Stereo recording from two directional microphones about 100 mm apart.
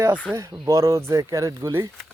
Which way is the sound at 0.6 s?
30° right (ahead or behind).